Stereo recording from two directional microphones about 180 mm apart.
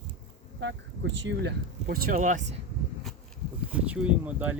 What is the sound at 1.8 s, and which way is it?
Speech, 50° right (ahead or behind).